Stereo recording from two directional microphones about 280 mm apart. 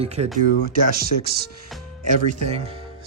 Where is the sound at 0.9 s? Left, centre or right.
Right.